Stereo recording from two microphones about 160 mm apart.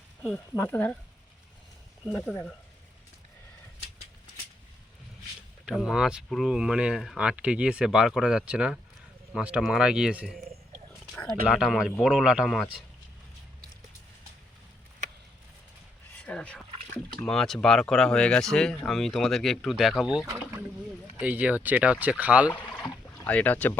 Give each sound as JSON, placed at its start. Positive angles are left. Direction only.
{"t": 0.5, "sound": "speech", "side_deg": 15}
{"t": 2.0, "sound": "speech", "side_deg": 0}
{"t": 5.6, "sound": "speech", "side_deg": -5}
{"t": 16.1, "sound": "speech", "side_deg": 5}
{"t": 20.2, "sound": "rowboat", "side_deg": -20}
{"t": 21.2, "sound": "speech", "side_deg": -10}
{"t": 22.7, "sound": "rowboat", "side_deg": 10}